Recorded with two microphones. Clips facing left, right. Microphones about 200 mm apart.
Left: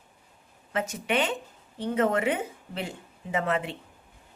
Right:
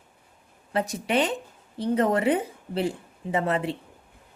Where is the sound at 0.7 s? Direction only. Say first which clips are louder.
Right 3 dB; 35° right (ahead or behind).